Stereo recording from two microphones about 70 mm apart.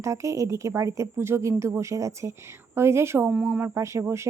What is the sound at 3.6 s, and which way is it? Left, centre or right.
Speech, right.